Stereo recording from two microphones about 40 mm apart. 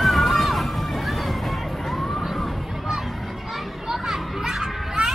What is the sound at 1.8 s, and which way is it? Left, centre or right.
Emergency vehicle, centre.